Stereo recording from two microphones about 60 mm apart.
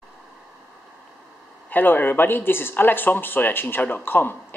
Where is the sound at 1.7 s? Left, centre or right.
Left.